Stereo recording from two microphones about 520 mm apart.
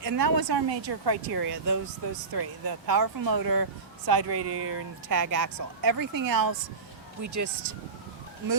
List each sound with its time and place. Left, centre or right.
0.0 s speech: right
4.4 s speech: right
5.0 s speech: right